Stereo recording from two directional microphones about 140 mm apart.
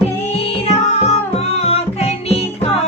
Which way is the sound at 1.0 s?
45° left (ahead or behind).